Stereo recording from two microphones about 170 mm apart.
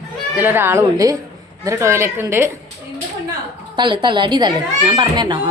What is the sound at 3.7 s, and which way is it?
Speech, 30° right (ahead or behind).